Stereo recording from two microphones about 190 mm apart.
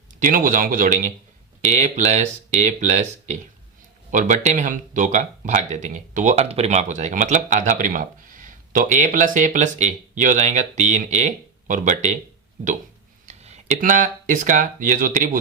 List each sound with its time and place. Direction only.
0.2 s speech: 45° right (ahead or behind)
13.2 s speech: 35° right (ahead or behind)